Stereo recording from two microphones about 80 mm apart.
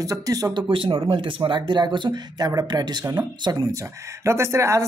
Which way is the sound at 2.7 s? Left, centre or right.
Right.